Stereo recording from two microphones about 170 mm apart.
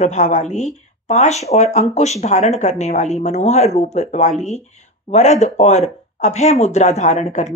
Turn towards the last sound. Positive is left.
turn(degrees=45)  # may be behind; listen again after turning